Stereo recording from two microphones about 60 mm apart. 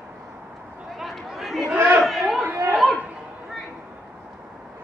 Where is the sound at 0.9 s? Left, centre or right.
Centre.